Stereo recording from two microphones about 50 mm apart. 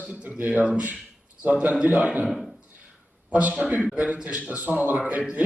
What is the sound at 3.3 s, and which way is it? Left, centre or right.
A man's voice, right.